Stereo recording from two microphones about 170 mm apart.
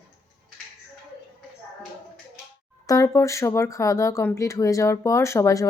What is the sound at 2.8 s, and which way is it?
Speech, 20° left (ahead or behind).